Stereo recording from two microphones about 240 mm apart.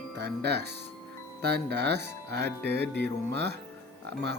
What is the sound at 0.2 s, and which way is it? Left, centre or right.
Speech, right.